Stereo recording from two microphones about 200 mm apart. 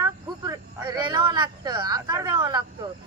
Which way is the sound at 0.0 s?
15° right (ahead or behind).